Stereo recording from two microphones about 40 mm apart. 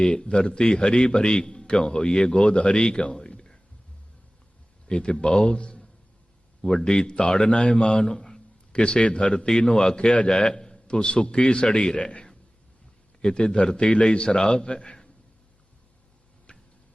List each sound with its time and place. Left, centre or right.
0.0 s a man's voice: left
2.8 s a sound: left
4.9 s a man's voice: left
8.1 s a sound: centre
8.7 s a man's voice: left
16.5 s tick-tock: left